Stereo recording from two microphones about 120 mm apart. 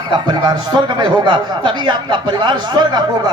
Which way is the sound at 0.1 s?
40° right (ahead or behind).